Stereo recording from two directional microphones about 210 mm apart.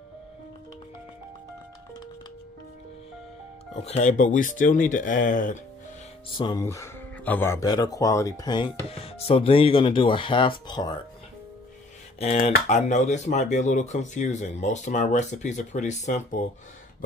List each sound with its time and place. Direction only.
3.8 s speech: 30° left (ahead or behind)
6.3 s speech: 20° left (ahead or behind)
12.2 s speech: 30° left (ahead or behind)